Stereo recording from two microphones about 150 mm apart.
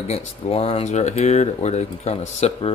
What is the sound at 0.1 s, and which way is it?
Speech, 40° left (ahead or behind).